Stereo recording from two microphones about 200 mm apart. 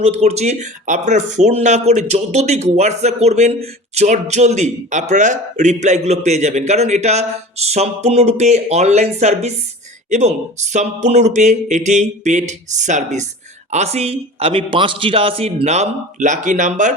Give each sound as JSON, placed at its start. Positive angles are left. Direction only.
{"t": 0.0, "sound": "a man's voice", "side_deg": -30}